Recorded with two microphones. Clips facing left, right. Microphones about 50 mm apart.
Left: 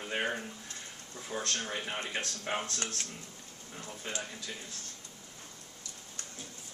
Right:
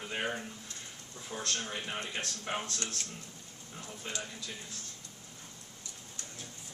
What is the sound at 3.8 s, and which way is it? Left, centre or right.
Speech, left.